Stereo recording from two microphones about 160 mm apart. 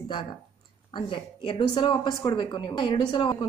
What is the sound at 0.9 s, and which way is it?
Speech, 30° left (ahead or behind).